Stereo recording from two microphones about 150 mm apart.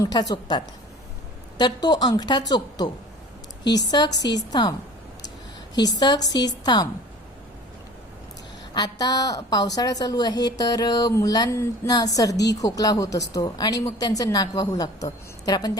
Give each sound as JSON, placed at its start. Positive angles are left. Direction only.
{"t": 0.0, "sound": "a woman's voice", "side_deg": 25}
{"t": 5.7, "sound": "a woman's voice", "side_deg": 25}
{"t": 8.7, "sound": "a woman's voice", "side_deg": 25}